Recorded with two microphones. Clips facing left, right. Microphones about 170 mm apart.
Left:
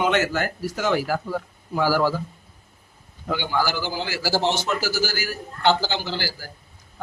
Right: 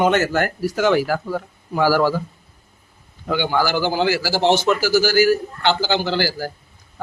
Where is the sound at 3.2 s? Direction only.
80° right.